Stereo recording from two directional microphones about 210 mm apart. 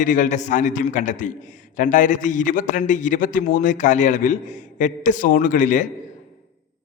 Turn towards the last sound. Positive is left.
turn(degrees=35)  # may be behind; listen again after turning